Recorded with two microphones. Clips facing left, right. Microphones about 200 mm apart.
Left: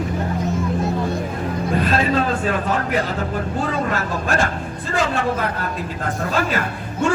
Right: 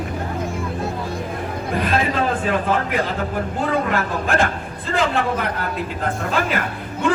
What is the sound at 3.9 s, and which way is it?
A woman's voice, 55° right (ahead or behind).